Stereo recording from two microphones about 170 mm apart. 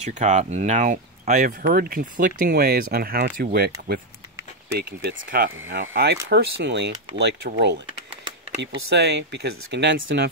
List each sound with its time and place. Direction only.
0.0 s speech: 45° right (ahead or behind)
1.6 s speech: 60° right (ahead or behind)
5.8 s speech: 75° right (ahead or behind)
6.2 s speech: 90° right